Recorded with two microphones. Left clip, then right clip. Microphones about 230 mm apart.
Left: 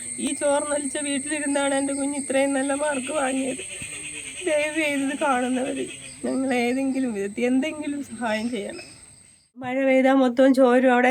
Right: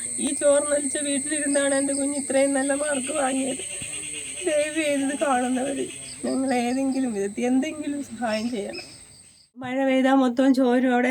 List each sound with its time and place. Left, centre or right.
0.2 s speech: centre
4.4 s speech: centre